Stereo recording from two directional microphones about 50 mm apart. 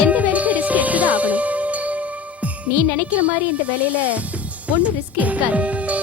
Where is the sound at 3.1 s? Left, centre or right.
Right.